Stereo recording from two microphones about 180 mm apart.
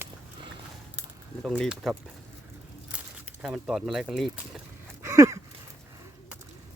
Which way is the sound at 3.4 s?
Centre (ahead or behind).